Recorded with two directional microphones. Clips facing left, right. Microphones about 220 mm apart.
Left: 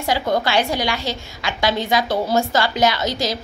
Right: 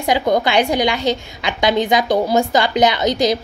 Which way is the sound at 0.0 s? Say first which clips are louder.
Right 4 dB; 15° right (ahead or behind).